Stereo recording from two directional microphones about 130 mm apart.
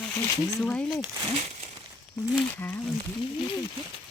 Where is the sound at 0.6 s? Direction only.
10° left (ahead or behind).